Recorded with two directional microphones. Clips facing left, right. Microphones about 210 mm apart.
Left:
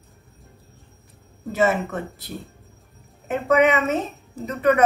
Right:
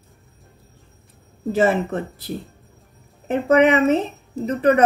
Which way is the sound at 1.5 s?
30° right (ahead or behind).